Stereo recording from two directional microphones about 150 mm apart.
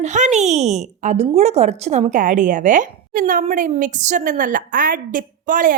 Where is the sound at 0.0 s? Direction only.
50° right (ahead or behind).